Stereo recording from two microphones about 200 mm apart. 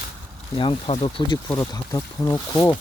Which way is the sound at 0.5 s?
25° left (ahead or behind).